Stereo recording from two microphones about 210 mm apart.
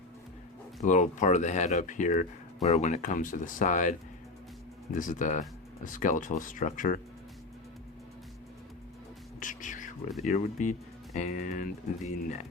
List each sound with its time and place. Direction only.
0.8 s speech: 35° left (ahead or behind)
9.4 s music: 35° left (ahead or behind)
10.2 s speech: 35° left (ahead or behind)